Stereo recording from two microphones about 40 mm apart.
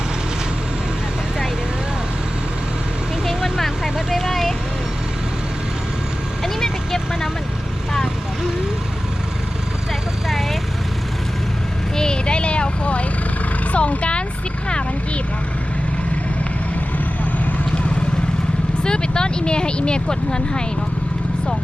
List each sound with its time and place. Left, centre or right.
3.2 s vehicle: centre
4.2 s vehicle: centre
6.4 s vehicle: centre
10.2 s vehicle: centre
11.9 s vehicle: centre
13.7 s a sound: left
14.7 s vehicle: left
18.8 s a sound: left